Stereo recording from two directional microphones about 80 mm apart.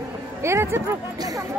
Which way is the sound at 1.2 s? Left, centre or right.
Right.